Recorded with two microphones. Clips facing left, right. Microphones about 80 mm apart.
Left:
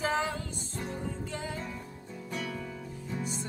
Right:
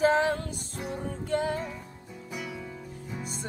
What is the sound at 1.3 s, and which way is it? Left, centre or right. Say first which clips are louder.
Music: right 10 dB; right.